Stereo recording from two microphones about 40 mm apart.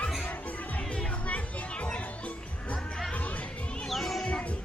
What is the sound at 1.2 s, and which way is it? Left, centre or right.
Music, left.